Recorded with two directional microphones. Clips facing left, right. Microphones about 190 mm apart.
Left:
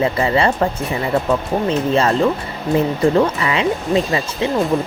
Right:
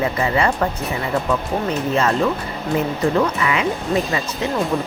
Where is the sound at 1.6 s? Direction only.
30° left (ahead or behind).